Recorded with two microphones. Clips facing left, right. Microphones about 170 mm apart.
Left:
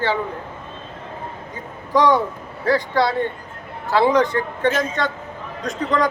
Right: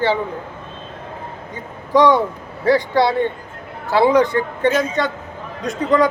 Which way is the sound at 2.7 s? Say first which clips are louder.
Right 3 dB; 10° right (ahead or behind).